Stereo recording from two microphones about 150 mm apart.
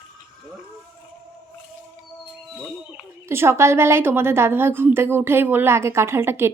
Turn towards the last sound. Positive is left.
turn(degrees=-15)  # may be behind; listen again after turning